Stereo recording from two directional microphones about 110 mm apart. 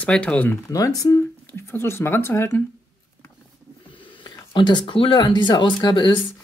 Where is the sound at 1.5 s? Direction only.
20° left (ahead or behind).